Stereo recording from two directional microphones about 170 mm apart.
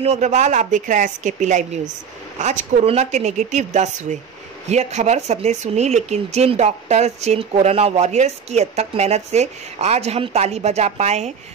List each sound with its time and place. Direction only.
0.0 s speech: 45° right (ahead or behind)